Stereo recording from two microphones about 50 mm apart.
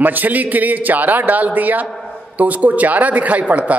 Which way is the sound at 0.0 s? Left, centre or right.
Right.